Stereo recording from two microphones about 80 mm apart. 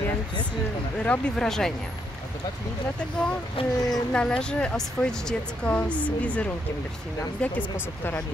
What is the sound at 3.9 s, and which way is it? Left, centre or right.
Speech, centre.